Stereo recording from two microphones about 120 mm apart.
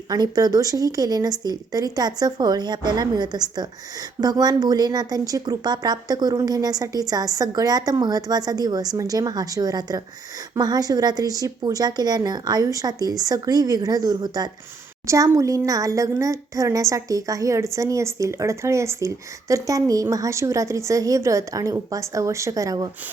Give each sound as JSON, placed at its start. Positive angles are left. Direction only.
{"t": 0.1, "sound": "speech", "side_deg": -35}